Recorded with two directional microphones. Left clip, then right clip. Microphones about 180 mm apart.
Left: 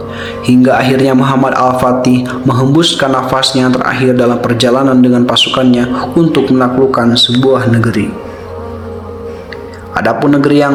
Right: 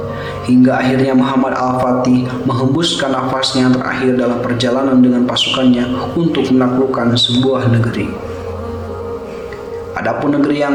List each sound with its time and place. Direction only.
0.4 s a man's voice: 40° left (ahead or behind)
9.9 s a man's voice: 40° left (ahead or behind)